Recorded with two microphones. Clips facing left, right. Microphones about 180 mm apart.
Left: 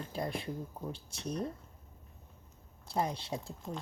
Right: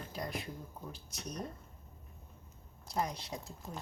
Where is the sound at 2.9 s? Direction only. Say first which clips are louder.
Left 3 dB; 30° left (ahead or behind).